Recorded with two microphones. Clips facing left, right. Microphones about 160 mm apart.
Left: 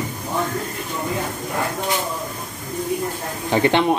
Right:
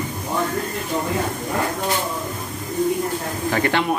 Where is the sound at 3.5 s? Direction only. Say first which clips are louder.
Left 4 dB; 20° left (ahead or behind).